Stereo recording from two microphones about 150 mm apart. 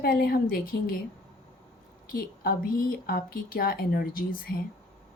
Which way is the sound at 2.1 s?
75° left (ahead or behind).